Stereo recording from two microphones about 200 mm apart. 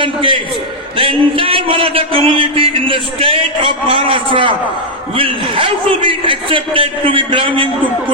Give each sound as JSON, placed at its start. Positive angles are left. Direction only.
{"t": 0.0, "sound": "speech", "side_deg": -25}